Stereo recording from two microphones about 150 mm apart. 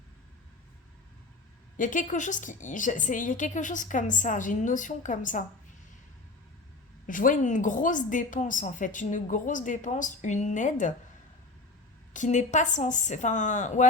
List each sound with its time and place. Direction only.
1.7 s a woman's voice: 60° left (ahead or behind)
7.1 s a woman's voice: 60° left (ahead or behind)
12.1 s a woman's voice: 55° left (ahead or behind)